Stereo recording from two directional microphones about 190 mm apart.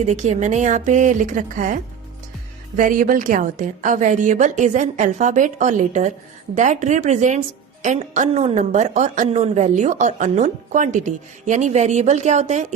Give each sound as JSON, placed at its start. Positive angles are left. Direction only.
{"t": 0.0, "sound": "a woman's voice", "side_deg": -40}